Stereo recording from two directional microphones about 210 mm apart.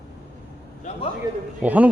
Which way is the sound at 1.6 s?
5° right (ahead or behind).